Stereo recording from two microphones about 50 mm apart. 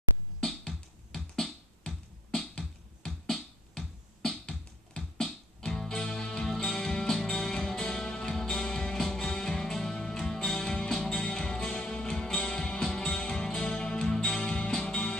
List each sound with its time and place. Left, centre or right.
0.4 s music: centre